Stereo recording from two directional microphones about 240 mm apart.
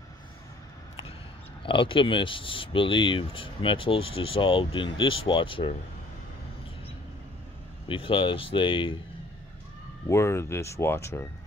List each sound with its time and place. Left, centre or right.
1.6 s speech: left
7.9 s speech: left
10.0 s speech: centre